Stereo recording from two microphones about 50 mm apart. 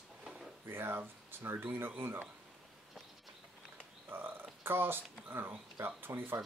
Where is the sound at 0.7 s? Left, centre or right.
Right.